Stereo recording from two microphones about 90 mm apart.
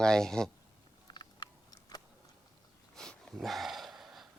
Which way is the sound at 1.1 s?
55° left (ahead or behind).